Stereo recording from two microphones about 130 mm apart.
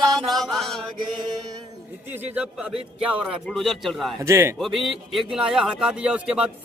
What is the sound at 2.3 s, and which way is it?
Speech, 10° right (ahead or behind).